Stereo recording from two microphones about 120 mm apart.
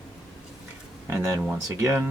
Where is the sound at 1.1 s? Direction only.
25° right (ahead or behind).